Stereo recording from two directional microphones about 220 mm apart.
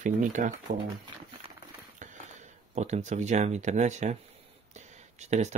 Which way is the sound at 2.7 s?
30° right (ahead or behind).